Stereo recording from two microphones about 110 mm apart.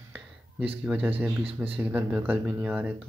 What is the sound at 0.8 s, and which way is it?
Speech, 10° right (ahead or behind).